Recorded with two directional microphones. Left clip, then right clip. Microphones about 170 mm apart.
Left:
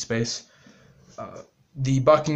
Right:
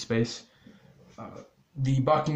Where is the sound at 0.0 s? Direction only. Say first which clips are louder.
Left 2 dB; 20° left (ahead or behind).